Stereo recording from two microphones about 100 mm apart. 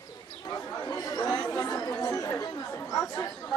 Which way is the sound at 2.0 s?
35° left (ahead or behind).